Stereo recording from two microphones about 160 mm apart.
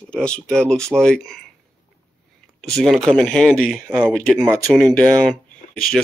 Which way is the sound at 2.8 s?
Centre (ahead or behind).